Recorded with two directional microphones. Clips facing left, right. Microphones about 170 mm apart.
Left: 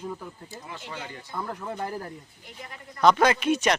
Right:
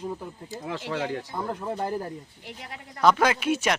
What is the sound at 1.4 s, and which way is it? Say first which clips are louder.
Speech: even; 25° right (ahead or behind).